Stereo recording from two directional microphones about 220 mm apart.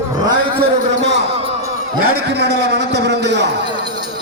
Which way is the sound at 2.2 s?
50° right (ahead or behind).